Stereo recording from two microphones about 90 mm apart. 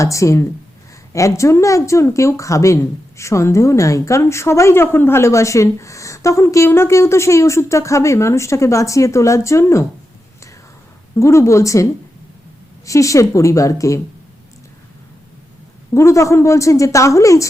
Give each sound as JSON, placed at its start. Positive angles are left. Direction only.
{"t": 0.0, "sound": "speech", "side_deg": 35}
{"t": 11.2, "sound": "speech", "side_deg": 35}
{"t": 16.0, "sound": "speech", "side_deg": 35}